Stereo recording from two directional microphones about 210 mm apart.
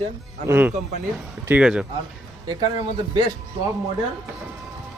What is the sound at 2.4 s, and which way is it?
Speech, 20° right (ahead or behind).